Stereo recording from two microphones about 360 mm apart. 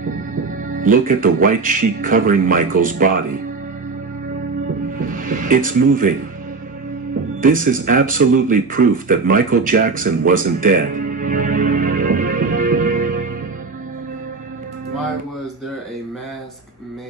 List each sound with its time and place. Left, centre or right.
0.7 s speech: right
4.8 s music: right
7.4 s speech: right